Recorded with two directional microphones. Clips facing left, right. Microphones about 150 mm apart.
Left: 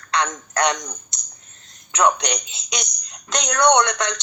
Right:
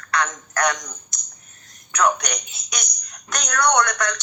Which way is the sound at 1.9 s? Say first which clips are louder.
Left 2 dB; 20° left (ahead or behind).